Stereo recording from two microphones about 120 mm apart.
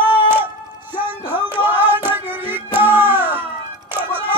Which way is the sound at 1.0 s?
15° right (ahead or behind).